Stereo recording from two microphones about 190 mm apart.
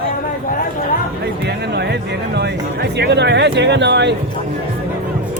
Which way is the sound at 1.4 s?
60° right (ahead or behind).